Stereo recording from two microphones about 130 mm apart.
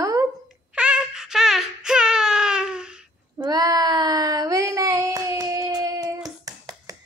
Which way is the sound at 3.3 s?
35° right (ahead or behind).